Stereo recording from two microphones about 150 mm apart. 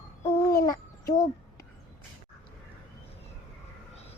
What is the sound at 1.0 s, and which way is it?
Speech, 55° left (ahead or behind).